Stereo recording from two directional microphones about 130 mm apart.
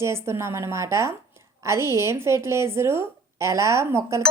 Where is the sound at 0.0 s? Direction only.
20° right (ahead or behind).